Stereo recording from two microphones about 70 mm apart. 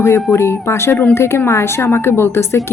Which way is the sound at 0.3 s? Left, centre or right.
Left.